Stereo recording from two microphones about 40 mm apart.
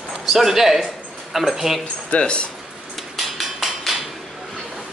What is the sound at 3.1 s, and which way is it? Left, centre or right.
Hammer, centre.